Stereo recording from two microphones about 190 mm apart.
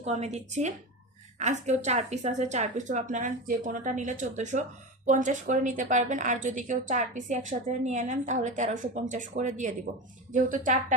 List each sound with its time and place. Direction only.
0.0 s a woman's voice: 35° right (ahead or behind)